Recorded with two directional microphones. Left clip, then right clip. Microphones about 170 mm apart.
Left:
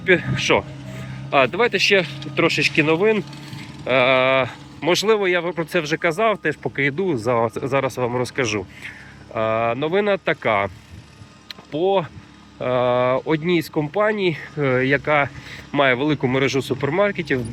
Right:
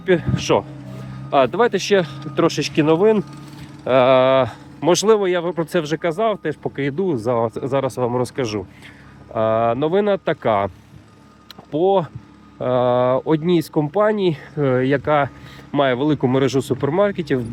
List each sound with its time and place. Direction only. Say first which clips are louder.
0.0 s speech: left 1 dB; 25° right (ahead or behind)
5.2 s speech: right 1 dB; 25° right (ahead or behind)
6.0 s speech: left 1 dB; 15° right (ahead or behind)
6.7 s speech: even; 25° right (ahead or behind)
9.3 s speech: right 3 dB; 35° right (ahead or behind)
11.4 s music: right 3 dB; 40° right (ahead or behind)
12.5 s speech: right 2 dB; 35° right (ahead or behind)